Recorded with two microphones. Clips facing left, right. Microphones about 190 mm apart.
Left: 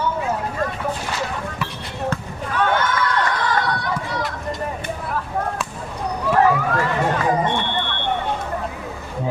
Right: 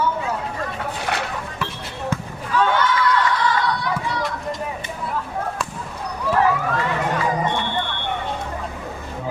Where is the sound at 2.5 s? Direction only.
55° left (ahead or behind).